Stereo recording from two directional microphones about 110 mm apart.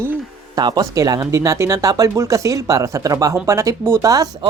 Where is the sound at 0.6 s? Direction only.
40° right (ahead or behind).